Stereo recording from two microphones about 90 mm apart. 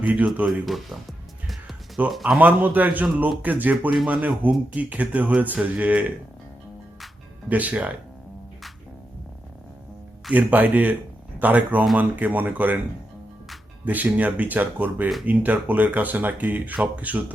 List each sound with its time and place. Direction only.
0.0 s speech: 15° right (ahead or behind)
0.6 s speech: centre (ahead or behind)
2.0 s speech: 5° right (ahead or behind)
2.4 s speech: 20° right (ahead or behind)
7.4 s speech: 15° right (ahead or behind)
10.3 s speech: 20° right (ahead or behind)
13.8 s speech: 20° right (ahead or behind)